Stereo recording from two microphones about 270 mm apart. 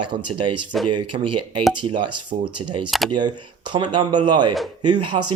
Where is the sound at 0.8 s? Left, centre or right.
Right.